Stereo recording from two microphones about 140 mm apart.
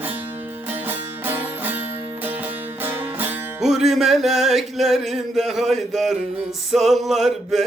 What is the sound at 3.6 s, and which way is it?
Music, centre (ahead or behind).